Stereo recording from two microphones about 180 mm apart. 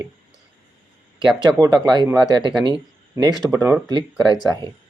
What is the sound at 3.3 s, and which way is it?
Speech, 10° right (ahead or behind).